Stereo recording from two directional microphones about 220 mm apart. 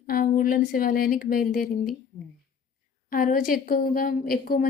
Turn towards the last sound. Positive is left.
turn(degrees=40)  # may be behind; listen again after turning